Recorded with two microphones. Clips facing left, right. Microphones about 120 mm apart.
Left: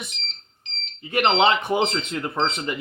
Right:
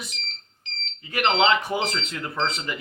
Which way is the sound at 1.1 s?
25° left (ahead or behind).